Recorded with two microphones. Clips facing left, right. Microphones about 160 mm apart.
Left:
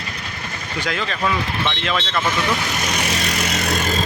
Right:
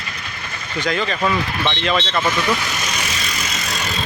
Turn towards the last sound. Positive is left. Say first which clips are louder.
# left 5 dB
turn(degrees=50)  # may be behind; listen again after turning